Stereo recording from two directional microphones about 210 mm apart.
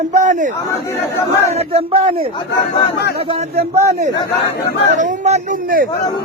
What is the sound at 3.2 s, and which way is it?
Speech, 25° right (ahead or behind).